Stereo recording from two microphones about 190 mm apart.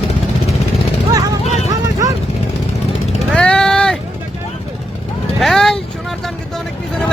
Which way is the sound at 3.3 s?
5° left (ahead or behind).